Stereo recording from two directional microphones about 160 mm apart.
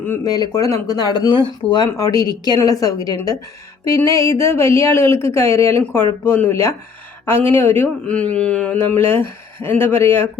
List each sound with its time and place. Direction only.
0.3 s a woman's voice: 25° left (ahead or behind)